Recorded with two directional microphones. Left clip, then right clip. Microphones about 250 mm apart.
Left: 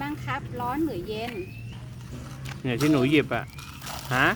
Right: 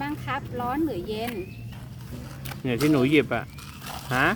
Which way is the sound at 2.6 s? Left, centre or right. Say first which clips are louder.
Right 1 dB; centre.